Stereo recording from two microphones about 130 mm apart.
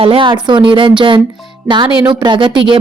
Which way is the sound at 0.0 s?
45° right (ahead or behind).